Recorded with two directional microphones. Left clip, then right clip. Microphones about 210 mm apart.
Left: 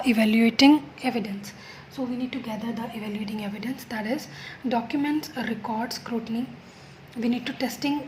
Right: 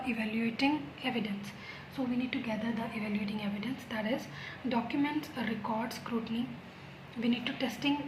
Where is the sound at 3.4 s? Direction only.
40° left (ahead or behind).